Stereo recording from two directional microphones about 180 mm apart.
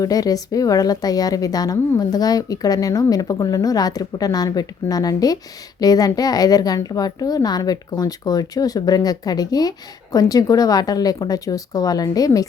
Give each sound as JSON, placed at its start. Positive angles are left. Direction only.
{"t": 0.0, "sound": "a woman's voice", "side_deg": 20}